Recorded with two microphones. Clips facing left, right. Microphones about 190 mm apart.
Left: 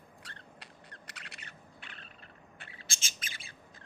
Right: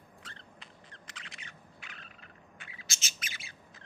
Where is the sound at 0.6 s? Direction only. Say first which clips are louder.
Left 1 dB; 65° left (ahead or behind).